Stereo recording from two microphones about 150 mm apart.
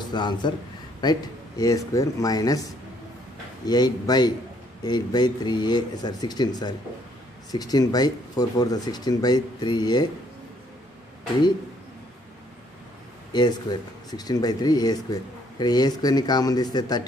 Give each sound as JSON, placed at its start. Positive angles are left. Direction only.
{"t": 0.1, "sound": "speech", "side_deg": 30}
{"t": 1.6, "sound": "speech", "side_deg": 25}
{"t": 3.6, "sound": "speech", "side_deg": 25}
{"t": 13.3, "sound": "speech", "side_deg": 30}